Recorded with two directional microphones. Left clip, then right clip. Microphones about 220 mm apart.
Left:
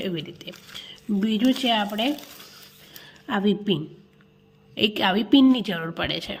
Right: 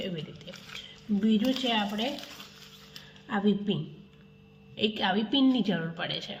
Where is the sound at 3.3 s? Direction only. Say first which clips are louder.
Left 5 dB; 50° left (ahead or behind).